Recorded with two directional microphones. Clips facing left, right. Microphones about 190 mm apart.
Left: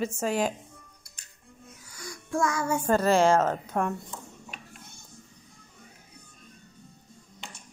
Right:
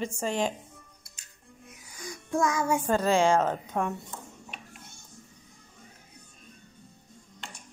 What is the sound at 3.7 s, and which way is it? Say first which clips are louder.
Speech: left 2 dB; centre (ahead or behind).